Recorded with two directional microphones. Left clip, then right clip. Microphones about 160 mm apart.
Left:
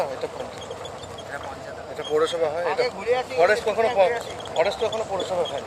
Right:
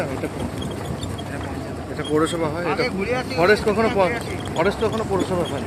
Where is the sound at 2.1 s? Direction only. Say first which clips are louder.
Even; 10° right (ahead or behind).